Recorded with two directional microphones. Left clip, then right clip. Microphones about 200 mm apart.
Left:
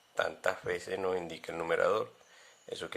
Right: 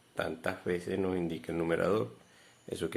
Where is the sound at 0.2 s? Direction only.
25° left (ahead or behind).